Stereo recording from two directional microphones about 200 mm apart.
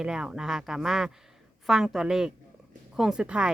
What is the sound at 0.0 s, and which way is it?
A woman's voice, 5° right (ahead or behind).